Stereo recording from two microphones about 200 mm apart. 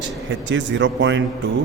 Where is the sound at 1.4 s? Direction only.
65° right (ahead or behind).